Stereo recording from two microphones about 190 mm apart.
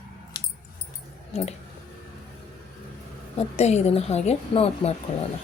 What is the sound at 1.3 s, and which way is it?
Speech, 35° left (ahead or behind).